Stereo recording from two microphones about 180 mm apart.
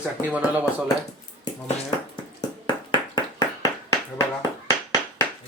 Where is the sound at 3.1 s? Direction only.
20° left (ahead or behind).